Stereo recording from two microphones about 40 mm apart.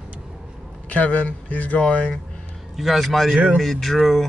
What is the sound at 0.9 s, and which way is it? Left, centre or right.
Speech, left.